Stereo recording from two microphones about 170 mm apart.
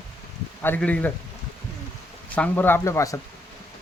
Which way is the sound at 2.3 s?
10° left (ahead or behind).